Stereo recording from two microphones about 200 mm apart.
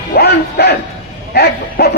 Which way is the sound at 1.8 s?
55° left (ahead or behind).